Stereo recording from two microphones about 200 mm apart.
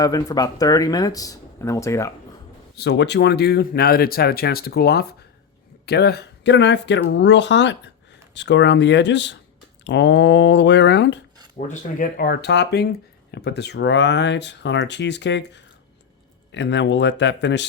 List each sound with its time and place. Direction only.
0.0 s speech: 15° left (ahead or behind)
2.7 s speech: 60° left (ahead or behind)
11.5 s speech: 40° left (ahead or behind); by 17.7 s 60° left (ahead or behind)